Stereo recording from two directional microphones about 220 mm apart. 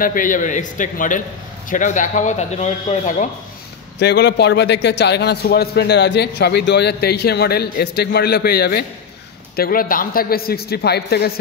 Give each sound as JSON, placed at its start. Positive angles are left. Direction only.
{"t": 0.0, "sound": "speech", "side_deg": 40}
{"t": 4.0, "sound": "a man's voice", "side_deg": 50}